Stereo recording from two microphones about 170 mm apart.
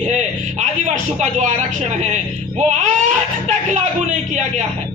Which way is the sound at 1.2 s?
45° right (ahead or behind).